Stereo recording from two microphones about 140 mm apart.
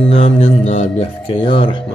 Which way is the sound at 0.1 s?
45° left (ahead or behind).